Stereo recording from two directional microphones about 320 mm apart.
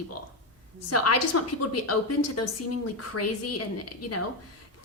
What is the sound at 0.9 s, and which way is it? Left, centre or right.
A woman's voice, left.